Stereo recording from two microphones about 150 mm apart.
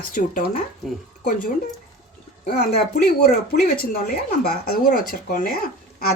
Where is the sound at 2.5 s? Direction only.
90° left.